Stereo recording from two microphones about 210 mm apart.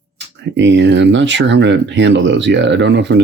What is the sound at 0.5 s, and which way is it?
Speech, 60° right (ahead or behind).